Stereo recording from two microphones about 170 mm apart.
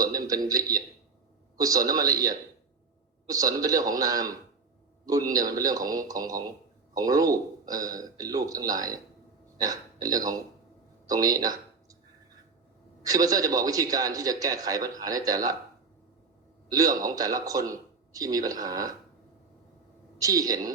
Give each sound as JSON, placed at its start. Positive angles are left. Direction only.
{"t": 0.0, "sound": "a man's voice", "side_deg": -20}
{"t": 11.0, "sound": "a sound", "side_deg": -20}
{"t": 13.1, "sound": "a man's voice", "side_deg": -20}
{"t": 16.6, "sound": "a man's voice", "side_deg": -20}
{"t": 20.1, "sound": "a man's voice", "side_deg": -20}